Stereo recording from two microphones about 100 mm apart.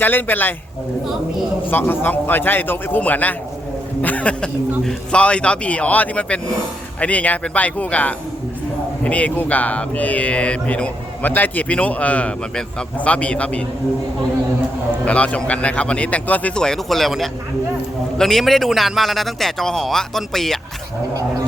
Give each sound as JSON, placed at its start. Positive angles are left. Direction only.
{"t": 0.0, "sound": "a man's voice", "side_deg": 20}
{"t": 1.7, "sound": "a man's voice", "side_deg": 20}
{"t": 15.0, "sound": "speech", "side_deg": 15}